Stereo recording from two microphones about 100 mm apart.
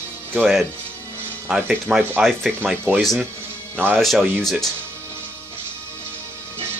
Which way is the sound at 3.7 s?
20° right (ahead or behind).